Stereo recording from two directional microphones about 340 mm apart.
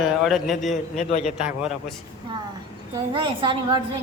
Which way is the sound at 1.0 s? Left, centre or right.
Left.